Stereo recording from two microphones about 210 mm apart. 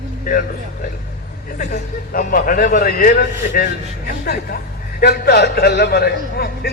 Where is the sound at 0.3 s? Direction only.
40° left (ahead or behind).